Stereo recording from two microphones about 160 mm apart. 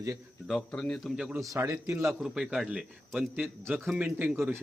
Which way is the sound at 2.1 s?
5° right (ahead or behind).